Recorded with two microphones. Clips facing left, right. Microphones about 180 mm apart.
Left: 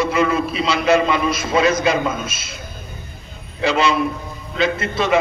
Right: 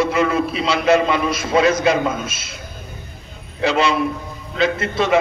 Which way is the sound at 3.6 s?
55° right (ahead or behind).